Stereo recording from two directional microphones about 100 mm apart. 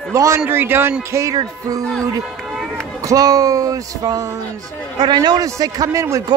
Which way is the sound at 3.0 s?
40° right (ahead or behind).